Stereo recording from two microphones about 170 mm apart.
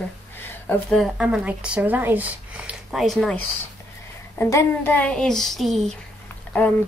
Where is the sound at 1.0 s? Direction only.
5° right (ahead or behind).